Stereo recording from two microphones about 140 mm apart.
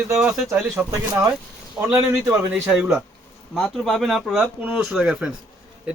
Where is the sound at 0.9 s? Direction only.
25° right (ahead or behind); by 3.0 s 5° right (ahead or behind).